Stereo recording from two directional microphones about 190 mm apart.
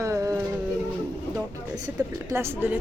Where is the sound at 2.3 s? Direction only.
15° right (ahead or behind).